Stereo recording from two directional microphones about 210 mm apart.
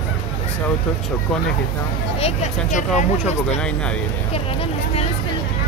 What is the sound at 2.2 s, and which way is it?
Speech, 35° left (ahead or behind).